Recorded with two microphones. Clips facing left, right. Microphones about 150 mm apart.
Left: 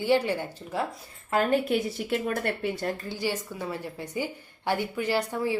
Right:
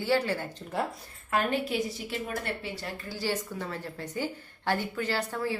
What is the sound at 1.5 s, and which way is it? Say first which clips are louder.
A woman's voice: left 5 dB; 50° left (ahead or behind).